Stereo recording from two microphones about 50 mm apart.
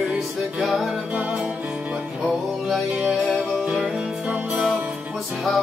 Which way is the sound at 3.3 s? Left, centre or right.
Right.